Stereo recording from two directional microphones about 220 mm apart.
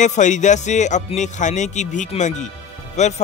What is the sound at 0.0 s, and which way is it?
Speech, 35° left (ahead or behind).